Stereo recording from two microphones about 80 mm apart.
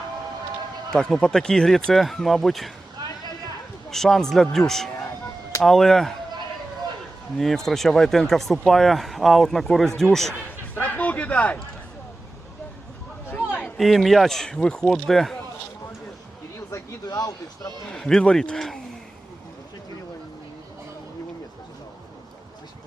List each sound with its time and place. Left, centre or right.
0.9 s speech: centre
3.8 s speech: centre
7.3 s speech: centre
10.8 s a sound: left
13.7 s speech: centre
17.1 s speech: left
17.8 s a man's voice: centre